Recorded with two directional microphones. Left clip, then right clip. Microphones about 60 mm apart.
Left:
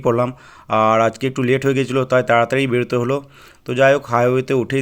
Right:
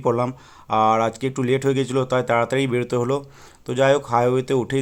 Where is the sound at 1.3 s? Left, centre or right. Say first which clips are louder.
Left 3 dB; left.